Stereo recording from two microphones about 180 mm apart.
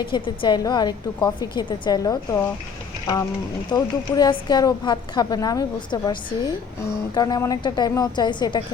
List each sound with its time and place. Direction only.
0.0 s a woman's voice: 25° left (ahead or behind)
3.7 s a woman's voice: 20° left (ahead or behind)